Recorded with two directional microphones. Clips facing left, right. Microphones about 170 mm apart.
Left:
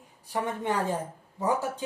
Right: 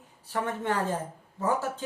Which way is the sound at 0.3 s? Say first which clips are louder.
Even; 15° left (ahead or behind).